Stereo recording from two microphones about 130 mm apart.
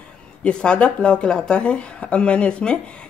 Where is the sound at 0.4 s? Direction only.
5° left (ahead or behind).